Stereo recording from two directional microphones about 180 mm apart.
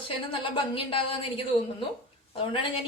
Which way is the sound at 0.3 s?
30° left (ahead or behind).